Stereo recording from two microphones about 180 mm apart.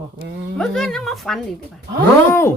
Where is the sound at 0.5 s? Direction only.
Centre (ahead or behind).